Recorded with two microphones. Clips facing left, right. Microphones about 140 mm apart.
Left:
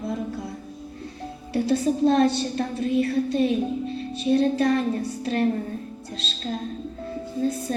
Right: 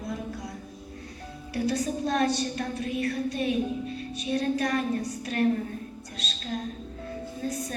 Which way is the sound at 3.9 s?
30° left (ahead or behind).